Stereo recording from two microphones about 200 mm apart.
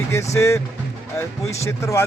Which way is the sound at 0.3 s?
15° left (ahead or behind).